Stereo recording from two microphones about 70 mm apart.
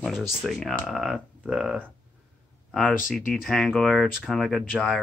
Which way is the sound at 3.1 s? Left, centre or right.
Centre.